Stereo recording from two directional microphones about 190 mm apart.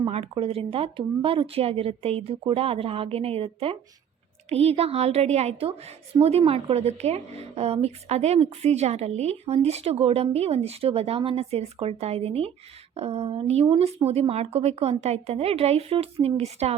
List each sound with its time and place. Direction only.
0.0 s a woman's voice: 30° right (ahead or behind)